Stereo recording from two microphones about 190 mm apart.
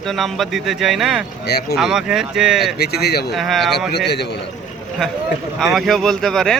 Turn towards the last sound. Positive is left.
turn(degrees=0)  # may be behind; listen again after turning